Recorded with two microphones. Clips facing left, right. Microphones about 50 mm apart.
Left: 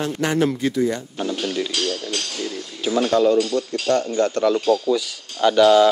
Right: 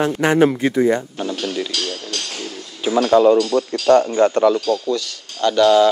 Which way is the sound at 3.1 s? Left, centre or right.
Centre.